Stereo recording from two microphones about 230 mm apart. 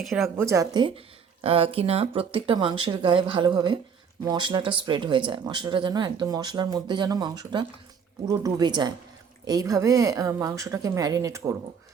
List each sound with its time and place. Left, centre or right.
0.0 s a woman's voice: centre
0.3 s speech: centre